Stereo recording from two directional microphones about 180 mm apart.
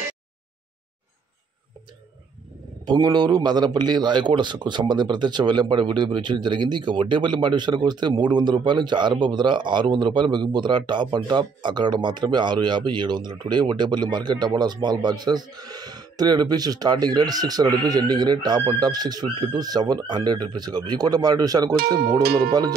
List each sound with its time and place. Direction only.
2.8 s a man's voice: 25° right (ahead or behind)
22.2 s speech: 60° right (ahead or behind)